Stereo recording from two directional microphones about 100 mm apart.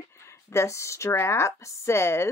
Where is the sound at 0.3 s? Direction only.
30° left (ahead or behind).